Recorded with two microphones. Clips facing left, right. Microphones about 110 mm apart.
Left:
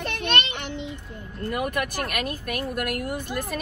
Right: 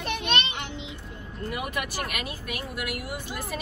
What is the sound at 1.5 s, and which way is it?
Speech, 55° left (ahead or behind).